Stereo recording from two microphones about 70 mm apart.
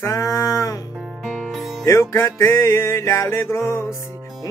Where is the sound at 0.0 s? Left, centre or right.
Left.